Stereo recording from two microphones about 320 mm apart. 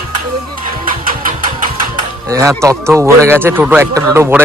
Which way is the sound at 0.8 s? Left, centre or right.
Right.